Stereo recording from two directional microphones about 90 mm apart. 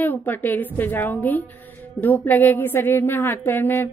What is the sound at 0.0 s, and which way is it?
A woman's voice, 20° left (ahead or behind).